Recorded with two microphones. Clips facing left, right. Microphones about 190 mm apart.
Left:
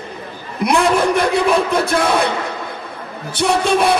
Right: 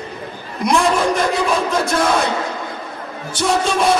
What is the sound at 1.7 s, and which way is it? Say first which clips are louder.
Speech: left 1 dB; 60° left (ahead or behind).